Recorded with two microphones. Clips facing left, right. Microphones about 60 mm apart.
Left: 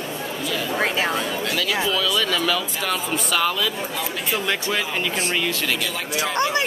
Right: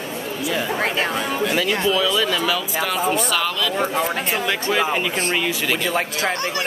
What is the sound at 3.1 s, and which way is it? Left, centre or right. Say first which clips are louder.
Speech: right 1 dB; centre.